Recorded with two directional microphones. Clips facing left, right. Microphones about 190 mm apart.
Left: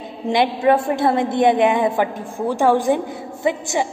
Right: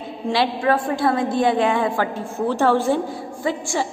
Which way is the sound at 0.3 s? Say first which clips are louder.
Left 3 dB; 20° left (ahead or behind).